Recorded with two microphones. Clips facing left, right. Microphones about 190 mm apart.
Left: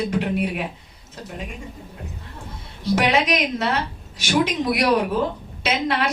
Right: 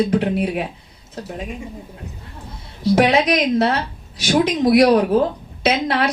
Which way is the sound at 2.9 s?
35° right (ahead or behind).